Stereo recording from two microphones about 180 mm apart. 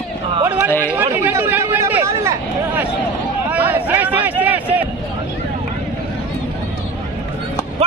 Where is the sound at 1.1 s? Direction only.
15° right (ahead or behind).